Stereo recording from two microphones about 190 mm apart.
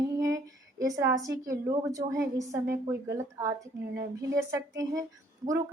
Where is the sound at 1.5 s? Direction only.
15° right (ahead or behind).